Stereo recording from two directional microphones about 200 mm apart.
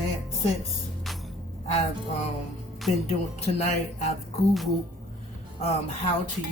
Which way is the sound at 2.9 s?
35° left (ahead or behind).